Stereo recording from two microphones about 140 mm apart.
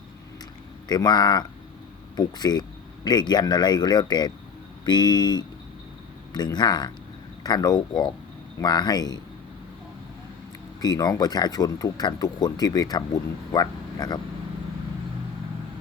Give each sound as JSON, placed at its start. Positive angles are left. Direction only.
{"t": 0.9, "sound": "speech", "side_deg": 30}
{"t": 10.8, "sound": "speech", "side_deg": 30}